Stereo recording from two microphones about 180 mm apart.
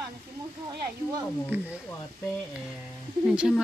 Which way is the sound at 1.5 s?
10° right (ahead or behind).